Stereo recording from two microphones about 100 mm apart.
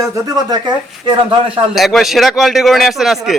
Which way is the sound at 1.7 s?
Centre (ahead or behind).